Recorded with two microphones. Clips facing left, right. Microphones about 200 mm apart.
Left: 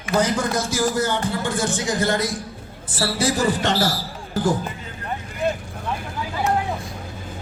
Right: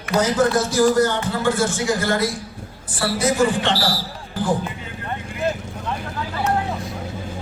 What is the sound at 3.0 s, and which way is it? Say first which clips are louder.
Speech: right 3 dB; 30° left (ahead or behind).